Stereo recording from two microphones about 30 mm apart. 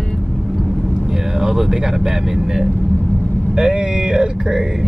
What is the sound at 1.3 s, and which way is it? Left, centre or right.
Speech, centre.